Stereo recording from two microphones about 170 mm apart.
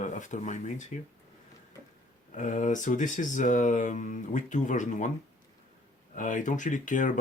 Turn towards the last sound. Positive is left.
turn(degrees=50)  # may be behind; listen again after turning